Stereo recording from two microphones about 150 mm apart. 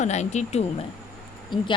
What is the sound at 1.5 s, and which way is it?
Speech, 30° left (ahead or behind).